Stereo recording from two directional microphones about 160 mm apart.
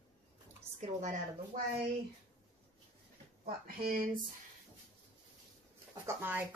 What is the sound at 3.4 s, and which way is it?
Speech, 65° right (ahead or behind).